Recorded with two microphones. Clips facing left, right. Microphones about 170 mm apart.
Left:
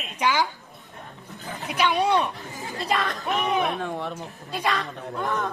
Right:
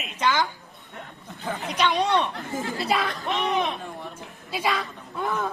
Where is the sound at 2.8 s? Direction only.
5° right (ahead or behind).